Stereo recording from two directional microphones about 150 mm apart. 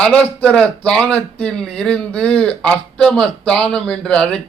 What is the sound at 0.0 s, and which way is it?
A man's voice, 5° left (ahead or behind).